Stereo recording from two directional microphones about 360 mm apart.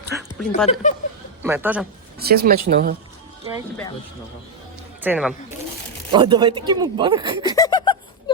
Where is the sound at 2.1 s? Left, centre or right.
Right.